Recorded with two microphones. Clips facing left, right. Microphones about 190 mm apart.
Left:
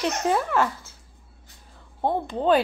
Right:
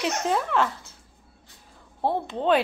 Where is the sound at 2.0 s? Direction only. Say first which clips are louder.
Left 1 dB; centre (ahead or behind).